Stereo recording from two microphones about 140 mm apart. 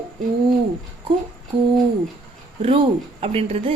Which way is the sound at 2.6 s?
45° right (ahead or behind).